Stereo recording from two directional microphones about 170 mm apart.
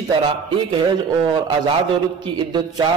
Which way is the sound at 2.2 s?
25° right (ahead or behind).